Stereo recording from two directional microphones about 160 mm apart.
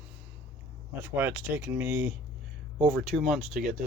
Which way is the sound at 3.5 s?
55° right (ahead or behind).